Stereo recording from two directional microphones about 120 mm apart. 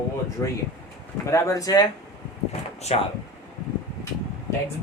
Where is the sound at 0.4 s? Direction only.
15° left (ahead or behind).